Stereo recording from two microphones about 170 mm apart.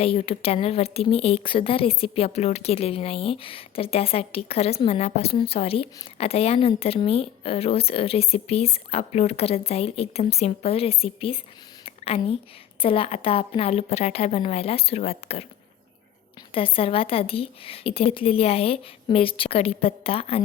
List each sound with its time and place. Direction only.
0.0 s a woman's voice: 35° left (ahead or behind)
11.9 s a sound: 35° left (ahead or behind)
12.8 s a woman's voice: 30° left (ahead or behind)
16.6 s a woman's voice: 35° left (ahead or behind)